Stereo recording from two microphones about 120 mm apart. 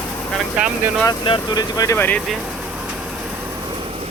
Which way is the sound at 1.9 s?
15° left (ahead or behind).